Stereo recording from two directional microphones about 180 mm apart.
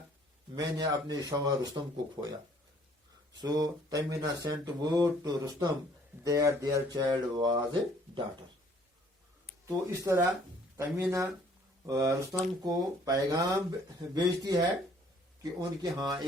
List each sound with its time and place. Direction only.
0.5 s speech: 20° right (ahead or behind)
3.4 s speech: 20° right (ahead or behind)
9.6 s speech: 20° right (ahead or behind)